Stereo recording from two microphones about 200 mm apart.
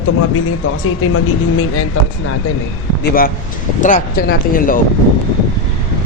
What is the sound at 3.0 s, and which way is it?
Speech, 45° left (ahead or behind).